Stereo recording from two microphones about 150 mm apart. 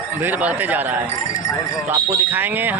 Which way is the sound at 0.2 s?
10° right (ahead or behind).